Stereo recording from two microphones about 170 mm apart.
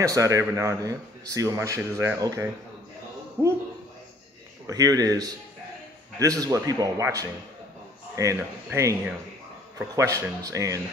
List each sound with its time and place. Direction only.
0.0 s speech: 20° right (ahead or behind)
4.6 s speech: 20° right (ahead or behind)